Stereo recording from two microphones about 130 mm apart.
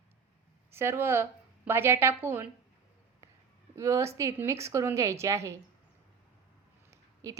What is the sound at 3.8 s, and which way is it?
A woman's voice, 20° right (ahead or behind).